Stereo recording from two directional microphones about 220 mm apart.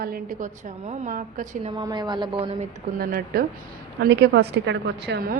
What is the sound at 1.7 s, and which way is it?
Speech, 20° right (ahead or behind).